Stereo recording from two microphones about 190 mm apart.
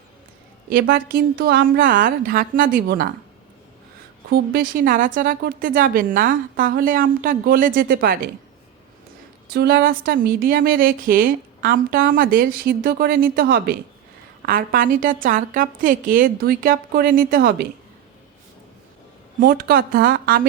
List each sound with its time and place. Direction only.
0.7 s speech: 50° right (ahead or behind)
4.3 s speech: 50° right (ahead or behind)
9.5 s speech: 55° right (ahead or behind)
19.4 s speech: 50° right (ahead or behind)